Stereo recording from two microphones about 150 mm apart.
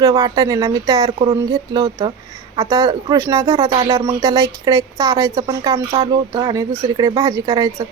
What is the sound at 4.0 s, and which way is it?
Speech, 35° right (ahead or behind).